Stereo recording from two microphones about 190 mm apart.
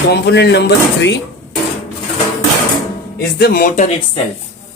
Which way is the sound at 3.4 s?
50° left (ahead or behind).